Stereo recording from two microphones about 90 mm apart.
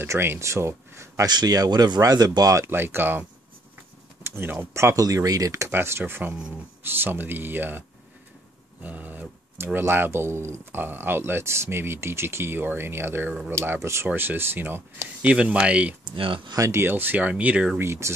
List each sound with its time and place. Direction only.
0.0 s speech: 25° right (ahead or behind)
1.2 s speech: 50° right (ahead or behind); by 4.9 s 25° right (ahead or behind)
4.9 s speech: 40° right (ahead or behind); by 7.8 s 20° right (ahead or behind)
8.8 s speech: 20° right (ahead or behind)
15.2 s speech: 15° right (ahead or behind)
16.1 s speech: 65° right (ahead or behind)
16.5 s speech: 35° right (ahead or behind)
16.8 s speech: 25° right (ahead or behind)
17.7 s speech: 30° right (ahead or behind)